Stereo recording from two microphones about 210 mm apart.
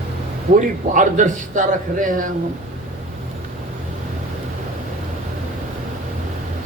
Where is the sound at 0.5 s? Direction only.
40° right (ahead or behind).